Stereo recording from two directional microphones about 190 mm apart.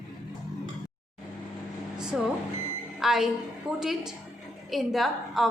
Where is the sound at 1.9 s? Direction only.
5° right (ahead or behind).